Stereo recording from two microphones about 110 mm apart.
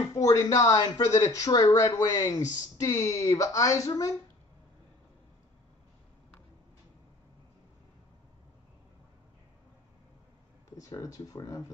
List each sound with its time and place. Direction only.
0.1 s speech: 35° left (ahead or behind)
10.8 s speech: 30° left (ahead or behind)